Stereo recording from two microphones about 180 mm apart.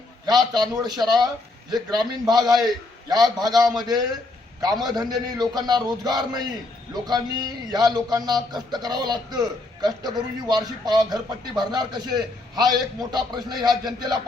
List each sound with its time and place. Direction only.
0.3 s speech: 20° right (ahead or behind)